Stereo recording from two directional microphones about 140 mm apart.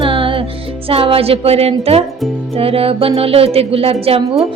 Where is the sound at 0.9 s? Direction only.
40° right (ahead or behind).